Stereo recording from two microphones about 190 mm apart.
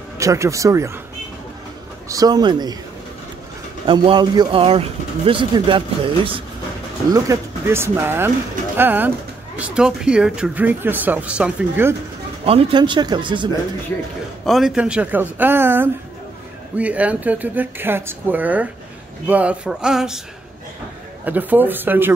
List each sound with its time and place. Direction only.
0.2 s speech: 15° right (ahead or behind)
2.0 s speech: 20° right (ahead or behind)
3.8 s speech: 25° right (ahead or behind)
7.1 s speech: 15° right (ahead or behind)
12.4 s speech: 25° right (ahead or behind)
14.4 s speech: centre (ahead or behind)
21.3 s speech: 10° right (ahead or behind)